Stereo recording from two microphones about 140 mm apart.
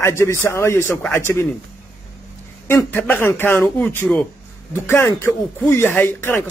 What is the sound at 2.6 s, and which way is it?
A man's voice, 15° left (ahead or behind).